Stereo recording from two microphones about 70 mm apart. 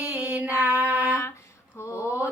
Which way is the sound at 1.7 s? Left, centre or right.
Left.